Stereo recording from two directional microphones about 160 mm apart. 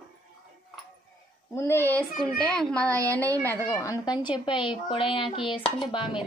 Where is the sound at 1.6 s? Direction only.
15° left (ahead or behind).